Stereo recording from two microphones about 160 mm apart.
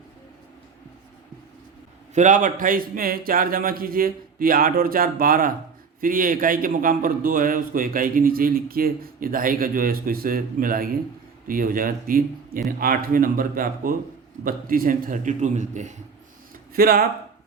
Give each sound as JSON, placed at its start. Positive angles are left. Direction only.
{"t": 2.1, "sound": "a man's voice", "side_deg": -55}
{"t": 16.7, "sound": "a man's voice", "side_deg": -65}